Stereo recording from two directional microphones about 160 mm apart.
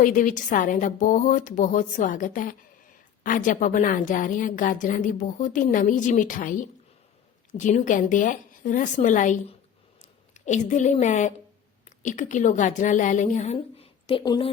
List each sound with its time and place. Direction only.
0.0 s a woman's voice: 55° left (ahead or behind); by 14.5 s 30° left (ahead or behind)